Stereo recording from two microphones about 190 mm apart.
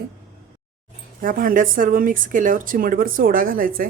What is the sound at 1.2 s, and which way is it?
Speech, 45° right (ahead or behind).